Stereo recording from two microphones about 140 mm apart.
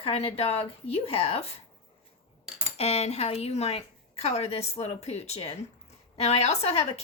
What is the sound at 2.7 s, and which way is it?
A woman's voice, 45° left (ahead or behind).